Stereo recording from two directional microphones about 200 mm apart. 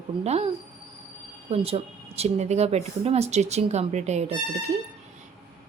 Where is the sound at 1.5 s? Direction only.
30° right (ahead or behind).